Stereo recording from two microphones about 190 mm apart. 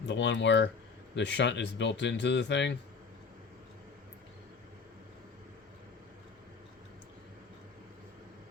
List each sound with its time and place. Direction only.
0.1 s speech: 70° left (ahead or behind)